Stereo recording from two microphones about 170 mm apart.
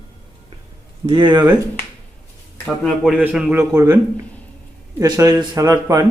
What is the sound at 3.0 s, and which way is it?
Speech, 5° right (ahead or behind).